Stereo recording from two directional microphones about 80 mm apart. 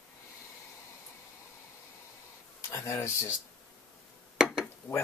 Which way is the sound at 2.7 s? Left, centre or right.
Left.